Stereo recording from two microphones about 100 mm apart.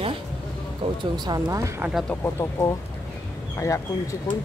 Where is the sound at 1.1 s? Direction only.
45° right (ahead or behind).